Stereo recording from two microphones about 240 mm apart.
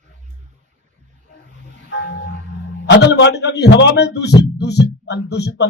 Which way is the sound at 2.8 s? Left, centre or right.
Left.